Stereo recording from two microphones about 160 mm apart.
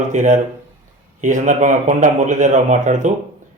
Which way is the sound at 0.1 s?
50° right (ahead or behind).